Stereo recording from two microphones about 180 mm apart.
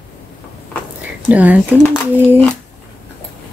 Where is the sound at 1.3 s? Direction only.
10° right (ahead or behind).